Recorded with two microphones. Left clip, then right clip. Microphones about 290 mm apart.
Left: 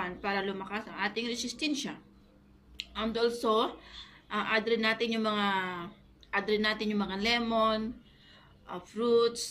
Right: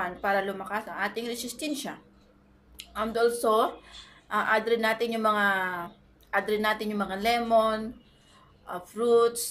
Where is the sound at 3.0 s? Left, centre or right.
Right.